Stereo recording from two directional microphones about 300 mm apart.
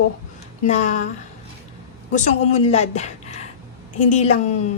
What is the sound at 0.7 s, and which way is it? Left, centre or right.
Speech, left.